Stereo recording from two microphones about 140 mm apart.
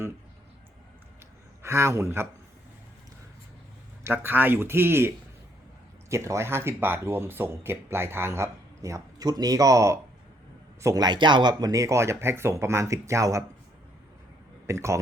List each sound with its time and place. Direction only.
1.6 s speech: 20° right (ahead or behind)
4.0 s speech: 15° right (ahead or behind)
14.7 s speech: 20° right (ahead or behind)